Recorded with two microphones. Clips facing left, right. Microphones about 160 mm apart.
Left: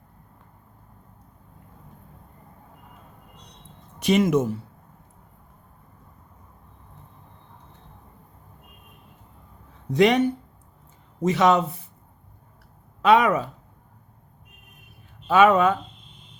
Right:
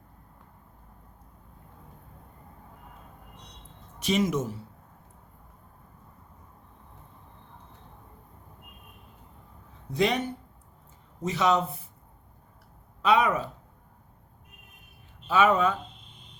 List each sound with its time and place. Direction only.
4.0 s speech: 60° left (ahead or behind)
9.9 s speech: 75° left (ahead or behind)
13.0 s speech: 70° left (ahead or behind)
15.3 s speech: 65° left (ahead or behind)